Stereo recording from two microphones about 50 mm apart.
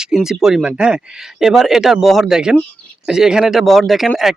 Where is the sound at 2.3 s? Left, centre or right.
Centre.